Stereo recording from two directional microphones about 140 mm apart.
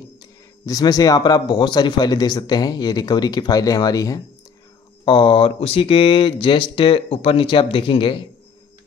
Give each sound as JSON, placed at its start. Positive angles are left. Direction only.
{"t": 0.7, "sound": "speech", "side_deg": 25}
{"t": 5.0, "sound": "speech", "side_deg": 40}